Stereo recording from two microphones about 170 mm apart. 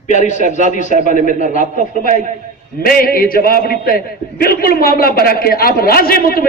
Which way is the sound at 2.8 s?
60° left (ahead or behind).